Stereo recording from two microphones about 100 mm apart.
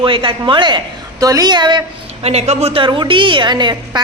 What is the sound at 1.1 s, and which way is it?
Speech, 35° right (ahead or behind).